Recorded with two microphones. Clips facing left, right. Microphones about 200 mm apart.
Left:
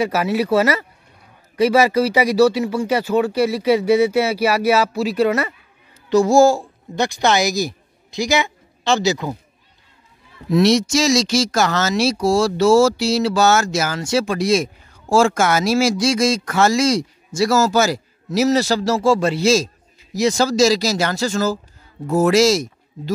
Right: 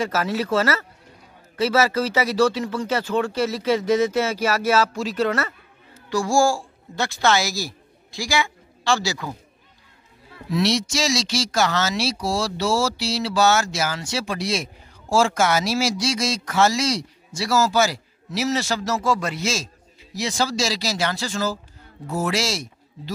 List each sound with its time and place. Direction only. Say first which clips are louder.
0.0 s a woman's voice: left 5 dB; 10° left (ahead or behind)
10.5 s speech: left 7 dB; 45° left (ahead or behind)